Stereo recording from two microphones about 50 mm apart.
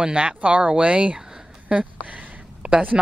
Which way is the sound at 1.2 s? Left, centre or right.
Centre.